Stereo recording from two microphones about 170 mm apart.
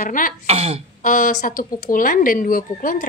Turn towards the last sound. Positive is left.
turn(degrees=55)  # may be behind; listen again after turning